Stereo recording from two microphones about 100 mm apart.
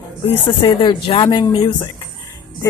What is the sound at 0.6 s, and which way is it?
Speech, 50° left (ahead or behind).